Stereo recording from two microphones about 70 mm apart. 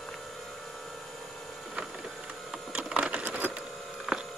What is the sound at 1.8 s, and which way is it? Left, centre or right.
Printer, centre.